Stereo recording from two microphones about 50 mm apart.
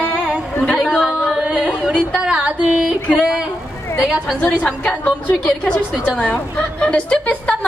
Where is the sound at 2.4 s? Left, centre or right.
Right.